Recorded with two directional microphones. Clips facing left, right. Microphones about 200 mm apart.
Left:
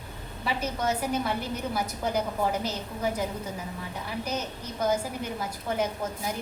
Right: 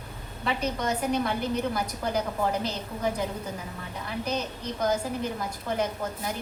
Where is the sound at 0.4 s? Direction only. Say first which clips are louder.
Right 1 dB; 5° left (ahead or behind).